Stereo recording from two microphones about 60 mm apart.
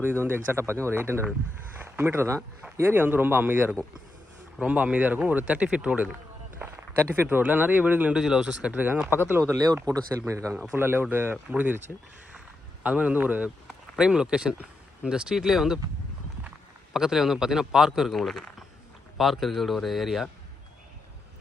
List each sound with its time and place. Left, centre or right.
0.0 s speech: right
2.9 s speech: right
4.6 s speech: right
6.6 s a sound: right
7.3 s speech: right
8.1 s speech: centre
8.7 s speech: right
9.8 s speech: right
10.2 s a man's voice: right
10.7 s speech: right
12.8 s speech: right
14.0 s speech: centre
16.9 s a man's voice: centre